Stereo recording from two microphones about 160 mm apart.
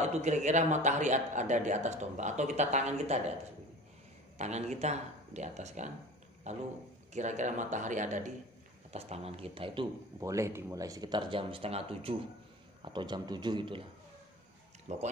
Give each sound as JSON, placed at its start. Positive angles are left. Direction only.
{"t": 0.0, "sound": "a man's voice", "side_deg": -45}
{"t": 4.4, "sound": "a man's voice", "side_deg": -45}
{"t": 10.2, "sound": "speech", "side_deg": -20}
{"t": 14.9, "sound": "a man's voice", "side_deg": -45}